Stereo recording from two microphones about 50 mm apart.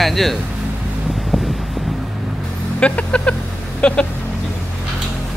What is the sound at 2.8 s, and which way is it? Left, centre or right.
Speech, left.